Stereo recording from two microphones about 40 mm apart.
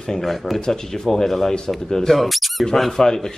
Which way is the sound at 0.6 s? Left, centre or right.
Centre.